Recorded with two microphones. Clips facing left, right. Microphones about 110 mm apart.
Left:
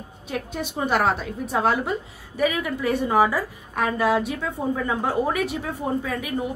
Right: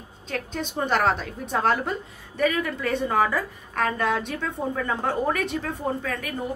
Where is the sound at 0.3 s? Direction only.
10° left (ahead or behind).